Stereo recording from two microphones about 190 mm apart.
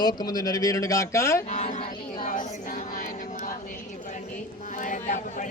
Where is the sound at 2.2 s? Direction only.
45° left (ahead or behind).